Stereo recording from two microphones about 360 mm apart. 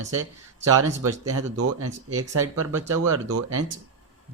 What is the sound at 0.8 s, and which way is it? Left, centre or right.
Speech, right.